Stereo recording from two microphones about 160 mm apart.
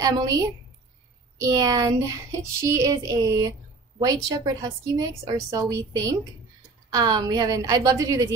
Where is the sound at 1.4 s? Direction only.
20° right (ahead or behind).